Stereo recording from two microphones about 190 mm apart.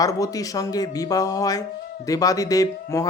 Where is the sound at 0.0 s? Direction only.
20° left (ahead or behind).